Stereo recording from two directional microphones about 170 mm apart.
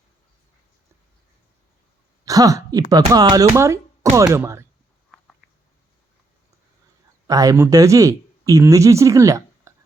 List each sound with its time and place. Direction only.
2.2 s a sound: 20° right (ahead or behind)
3.1 s speech: 20° right (ahead or behind)
7.3 s speech: 20° right (ahead or behind)